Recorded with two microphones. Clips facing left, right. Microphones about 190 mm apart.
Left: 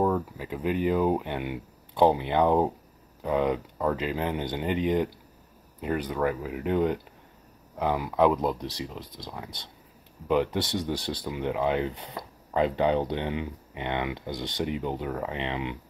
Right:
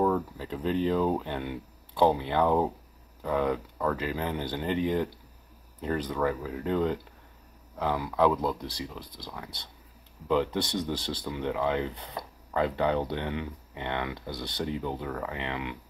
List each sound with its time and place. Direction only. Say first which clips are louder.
0.0 s speech: left 1 dB; 10° left (ahead or behind)